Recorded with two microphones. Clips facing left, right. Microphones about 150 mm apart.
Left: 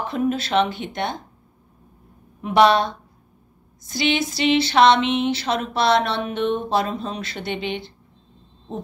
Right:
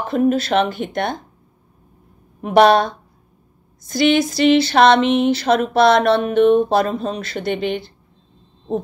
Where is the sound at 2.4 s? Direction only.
45° right (ahead or behind).